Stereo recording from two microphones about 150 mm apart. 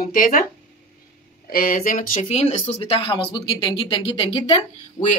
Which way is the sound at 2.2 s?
40° left (ahead or behind).